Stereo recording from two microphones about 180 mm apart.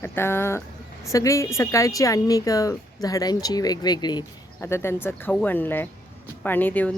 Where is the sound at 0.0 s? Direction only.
15° left (ahead or behind).